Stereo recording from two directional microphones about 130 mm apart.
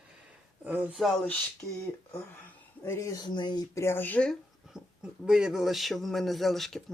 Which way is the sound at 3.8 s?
15° left (ahead or behind).